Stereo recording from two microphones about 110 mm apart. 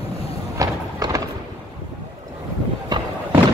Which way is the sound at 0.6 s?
30° right (ahead or behind).